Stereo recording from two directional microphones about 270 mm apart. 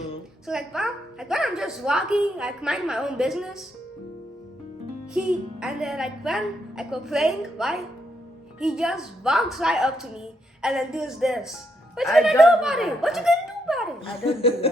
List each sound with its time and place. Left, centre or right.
0.4 s a woman's voice: centre
5.1 s a woman's voice: centre
14.0 s speech: left